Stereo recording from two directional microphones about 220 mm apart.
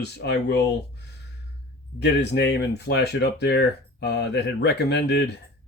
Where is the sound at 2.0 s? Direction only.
50° left (ahead or behind).